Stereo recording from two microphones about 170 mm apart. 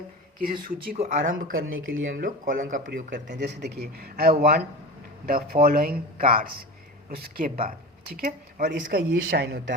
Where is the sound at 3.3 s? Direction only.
75° right (ahead or behind).